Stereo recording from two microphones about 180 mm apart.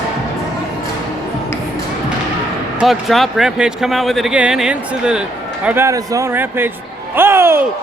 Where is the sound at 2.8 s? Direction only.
Centre (ahead or behind).